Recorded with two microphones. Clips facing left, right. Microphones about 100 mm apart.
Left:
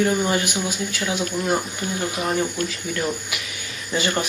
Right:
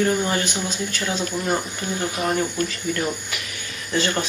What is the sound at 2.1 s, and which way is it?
Speech, centre (ahead or behind).